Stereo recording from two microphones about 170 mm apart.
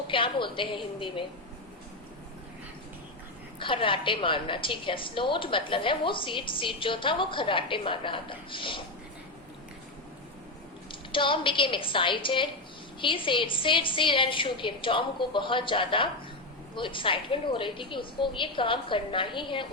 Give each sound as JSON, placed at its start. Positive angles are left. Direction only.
{"t": 0.1, "sound": "a woman's voice", "side_deg": 30}
{"t": 3.6, "sound": "a woman's voice", "side_deg": 30}
{"t": 11.1, "sound": "a woman's voice", "side_deg": 30}